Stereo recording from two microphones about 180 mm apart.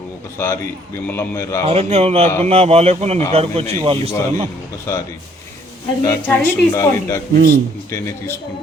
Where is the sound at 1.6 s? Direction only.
35° right (ahead or behind).